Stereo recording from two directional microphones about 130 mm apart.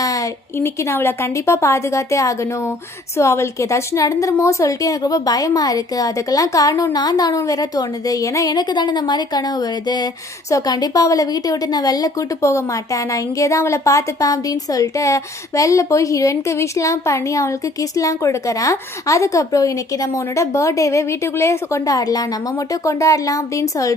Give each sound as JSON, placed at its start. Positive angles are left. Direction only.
{"t": 0.0, "sound": "a woman's voice", "side_deg": 25}